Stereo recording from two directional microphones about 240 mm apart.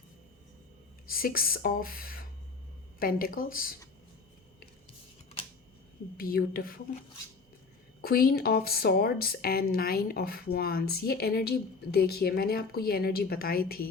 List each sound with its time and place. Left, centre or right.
1.0 s a woman's voice: left
5.4 s a sound: left
6.1 s a woman's voice: left
8.0 s a woman's voice: left